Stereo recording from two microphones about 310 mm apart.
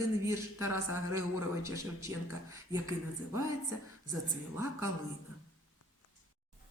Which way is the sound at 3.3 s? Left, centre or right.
Centre.